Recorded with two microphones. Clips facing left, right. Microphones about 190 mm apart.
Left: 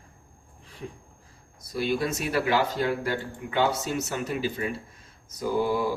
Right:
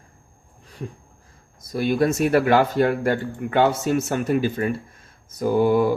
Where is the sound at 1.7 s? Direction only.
50° right (ahead or behind).